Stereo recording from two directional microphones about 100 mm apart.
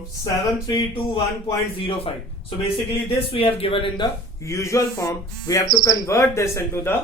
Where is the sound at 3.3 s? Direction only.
70° left (ahead or behind).